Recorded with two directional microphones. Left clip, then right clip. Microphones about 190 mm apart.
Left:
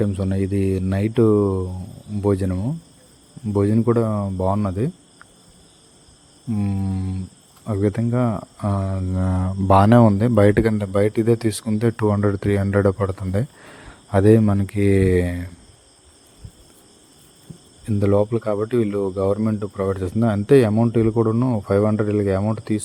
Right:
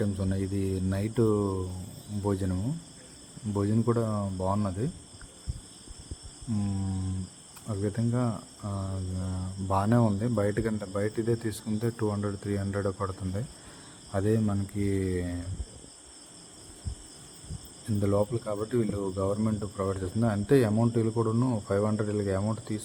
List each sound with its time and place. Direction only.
0.0 s speech: 40° left (ahead or behind)
6.6 s speech: 35° left (ahead or behind)
7.7 s cricket: 45° left (ahead or behind)
18.0 s speech: 45° left (ahead or behind)